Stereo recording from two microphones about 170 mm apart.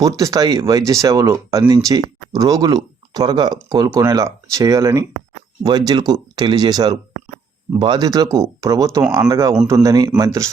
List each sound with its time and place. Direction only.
0.0 s speech: 20° right (ahead or behind)